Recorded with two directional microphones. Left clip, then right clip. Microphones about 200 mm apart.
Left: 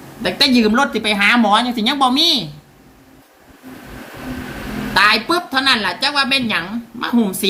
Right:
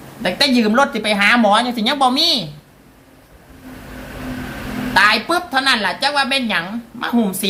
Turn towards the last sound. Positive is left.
turn(degrees=-10)  # may be behind; listen again after turning